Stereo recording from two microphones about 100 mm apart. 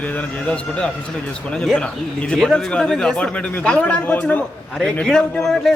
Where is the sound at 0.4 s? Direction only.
10° left (ahead or behind).